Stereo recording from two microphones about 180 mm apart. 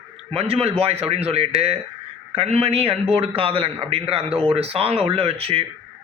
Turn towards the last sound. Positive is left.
turn(degrees=-35)  # may be behind; listen again after turning